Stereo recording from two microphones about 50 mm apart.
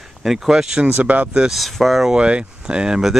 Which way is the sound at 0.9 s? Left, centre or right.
Right.